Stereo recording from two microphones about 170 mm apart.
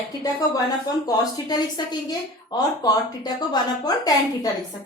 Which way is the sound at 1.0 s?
20° left (ahead or behind).